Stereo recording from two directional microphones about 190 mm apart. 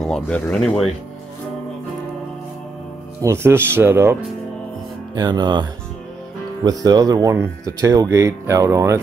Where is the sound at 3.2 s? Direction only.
15° right (ahead or behind).